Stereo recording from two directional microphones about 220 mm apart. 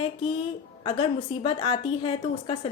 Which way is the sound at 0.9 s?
25° left (ahead or behind).